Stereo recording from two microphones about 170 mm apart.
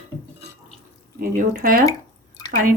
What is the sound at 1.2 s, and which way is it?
Speech, 55° right (ahead or behind).